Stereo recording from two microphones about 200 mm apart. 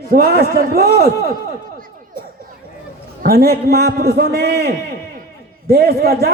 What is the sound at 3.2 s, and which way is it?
A man's voice, 50° right (ahead or behind).